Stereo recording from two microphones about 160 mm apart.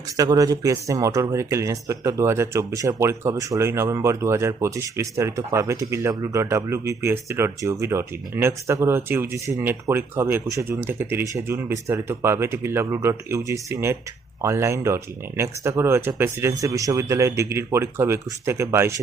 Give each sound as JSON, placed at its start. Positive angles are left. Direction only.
{"t": 0.2, "sound": "speech", "side_deg": -20}